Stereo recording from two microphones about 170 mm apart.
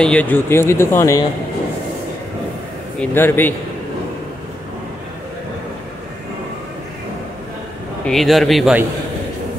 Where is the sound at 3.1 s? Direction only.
10° left (ahead or behind).